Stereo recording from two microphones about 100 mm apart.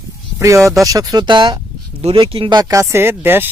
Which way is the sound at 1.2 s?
50° right (ahead or behind).